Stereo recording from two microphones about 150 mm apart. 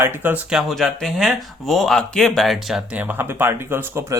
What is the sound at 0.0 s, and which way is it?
Speech, 15° right (ahead or behind).